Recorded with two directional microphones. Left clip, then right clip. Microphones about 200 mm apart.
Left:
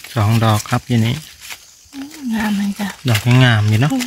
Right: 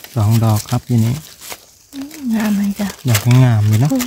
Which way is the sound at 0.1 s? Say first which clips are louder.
Left 2 dB; 15° left (ahead or behind).